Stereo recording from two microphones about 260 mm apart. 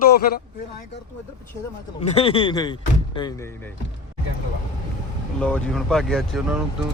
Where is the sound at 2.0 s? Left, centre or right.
Left.